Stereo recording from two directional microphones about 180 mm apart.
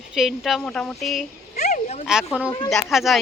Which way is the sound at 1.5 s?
40° left (ahead or behind).